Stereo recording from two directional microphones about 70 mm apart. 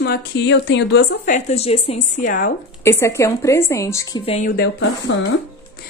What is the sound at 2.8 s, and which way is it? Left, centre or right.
A woman's voice, left.